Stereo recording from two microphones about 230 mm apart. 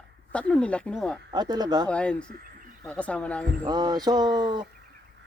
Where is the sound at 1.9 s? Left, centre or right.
Centre.